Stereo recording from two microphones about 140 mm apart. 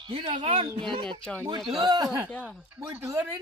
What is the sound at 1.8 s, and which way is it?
Speech, 25° right (ahead or behind).